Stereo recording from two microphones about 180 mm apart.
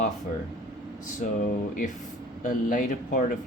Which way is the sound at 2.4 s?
50° left (ahead or behind).